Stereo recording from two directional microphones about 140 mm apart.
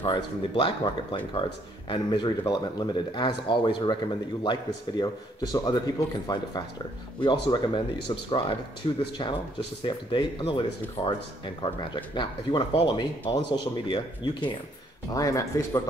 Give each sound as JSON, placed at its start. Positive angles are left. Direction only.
{"t": 0.0, "sound": "speech", "side_deg": 40}
{"t": 15.0, "sound": "speech", "side_deg": 25}